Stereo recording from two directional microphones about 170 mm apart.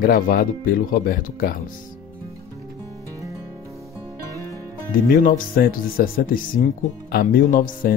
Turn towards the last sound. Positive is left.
turn(degrees=55)  # may be behind; listen again after turning